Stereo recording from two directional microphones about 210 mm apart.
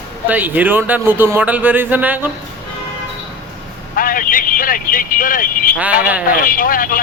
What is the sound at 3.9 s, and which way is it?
Speech, 40° left (ahead or behind).